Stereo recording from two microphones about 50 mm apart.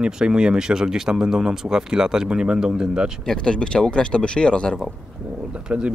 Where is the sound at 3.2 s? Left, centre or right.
Centre.